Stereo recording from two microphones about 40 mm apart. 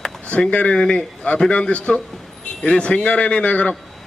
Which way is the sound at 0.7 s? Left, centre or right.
Left.